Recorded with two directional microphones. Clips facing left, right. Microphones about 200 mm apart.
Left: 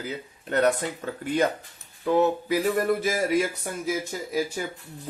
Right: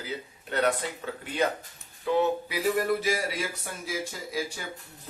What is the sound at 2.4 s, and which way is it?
Speech, 45° left (ahead or behind).